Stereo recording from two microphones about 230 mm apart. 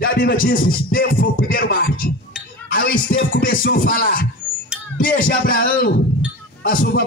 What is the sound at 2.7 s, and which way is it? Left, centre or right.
A man's voice, left.